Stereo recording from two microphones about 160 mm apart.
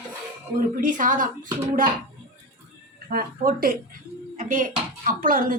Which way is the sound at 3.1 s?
65° right (ahead or behind).